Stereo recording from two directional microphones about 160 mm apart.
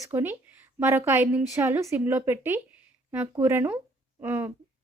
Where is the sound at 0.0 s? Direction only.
15° right (ahead or behind).